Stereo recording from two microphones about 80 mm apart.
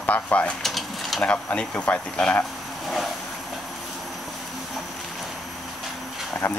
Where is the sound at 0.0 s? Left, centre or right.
Centre.